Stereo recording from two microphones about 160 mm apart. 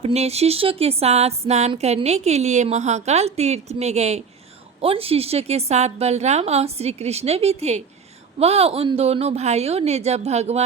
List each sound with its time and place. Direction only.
0.0 s a woman's voice: 40° right (ahead or behind)